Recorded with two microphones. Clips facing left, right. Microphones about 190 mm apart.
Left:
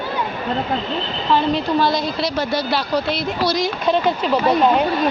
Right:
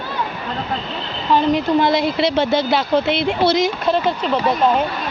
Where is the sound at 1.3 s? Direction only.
20° right (ahead or behind).